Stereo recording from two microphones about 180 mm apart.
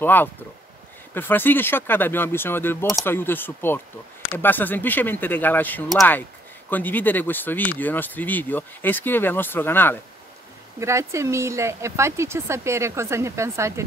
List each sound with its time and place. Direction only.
0.0 s speech: 10° left (ahead or behind)
10.8 s speech: 15° right (ahead or behind)